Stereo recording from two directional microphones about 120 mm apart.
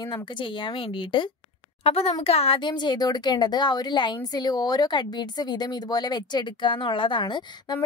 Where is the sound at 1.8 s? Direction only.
60° left (ahead or behind).